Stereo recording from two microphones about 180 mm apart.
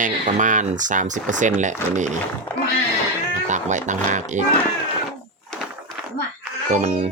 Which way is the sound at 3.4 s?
40° right (ahead or behind).